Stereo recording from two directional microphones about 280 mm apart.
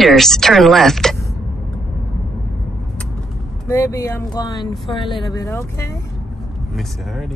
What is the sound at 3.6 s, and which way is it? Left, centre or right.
Music, centre.